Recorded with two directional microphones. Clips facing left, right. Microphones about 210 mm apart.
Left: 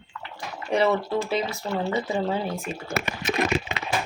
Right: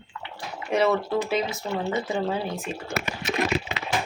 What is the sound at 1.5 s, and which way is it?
Speech, 20° right (ahead or behind).